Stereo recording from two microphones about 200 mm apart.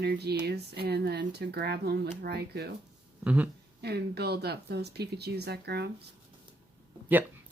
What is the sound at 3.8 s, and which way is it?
Speech, 55° right (ahead or behind).